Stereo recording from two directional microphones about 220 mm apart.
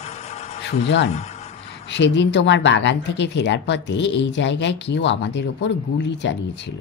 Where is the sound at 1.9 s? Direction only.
55° left (ahead or behind).